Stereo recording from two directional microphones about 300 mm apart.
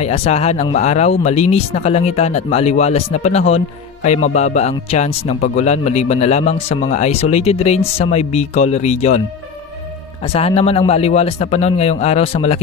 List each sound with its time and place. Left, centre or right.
0.0 s speech: left
10.2 s speech: centre